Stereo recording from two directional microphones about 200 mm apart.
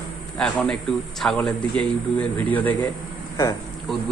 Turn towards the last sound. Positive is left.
turn(degrees=0)  # may be behind; listen again after turning